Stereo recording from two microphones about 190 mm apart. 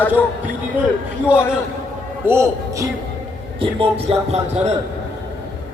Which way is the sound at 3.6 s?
30° right (ahead or behind).